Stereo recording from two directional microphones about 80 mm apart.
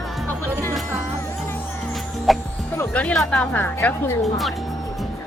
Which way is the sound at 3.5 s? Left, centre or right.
Left.